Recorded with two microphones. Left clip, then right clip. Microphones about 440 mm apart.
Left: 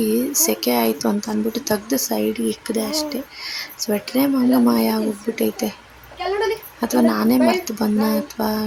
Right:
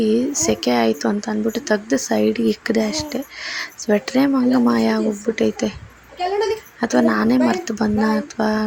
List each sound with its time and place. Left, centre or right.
0.0 s speech: left
6.7 s speech: left